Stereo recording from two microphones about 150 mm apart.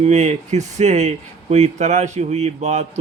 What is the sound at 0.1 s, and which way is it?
Speech, 50° right (ahead or behind).